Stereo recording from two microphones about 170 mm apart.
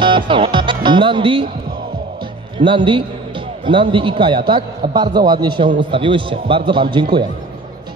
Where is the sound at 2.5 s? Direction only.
30° right (ahead or behind).